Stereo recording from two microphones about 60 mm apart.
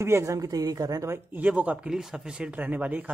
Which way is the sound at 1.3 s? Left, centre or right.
Right.